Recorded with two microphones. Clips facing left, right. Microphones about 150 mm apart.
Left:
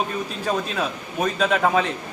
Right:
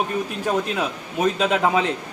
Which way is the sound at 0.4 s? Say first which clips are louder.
Right 1 dB; 15° right (ahead or behind).